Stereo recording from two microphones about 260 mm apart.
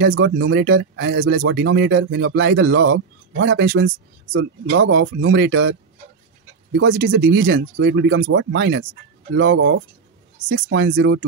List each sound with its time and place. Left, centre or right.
0.0 s speech: right